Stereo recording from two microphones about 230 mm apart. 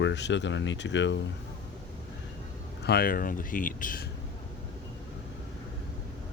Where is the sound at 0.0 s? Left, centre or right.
Left.